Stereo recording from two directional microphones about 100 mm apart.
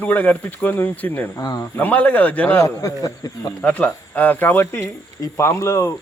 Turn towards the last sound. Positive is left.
turn(degrees=30)  # may be behind; listen again after turning